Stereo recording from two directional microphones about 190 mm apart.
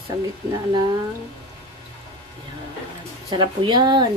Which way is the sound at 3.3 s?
25° right (ahead or behind).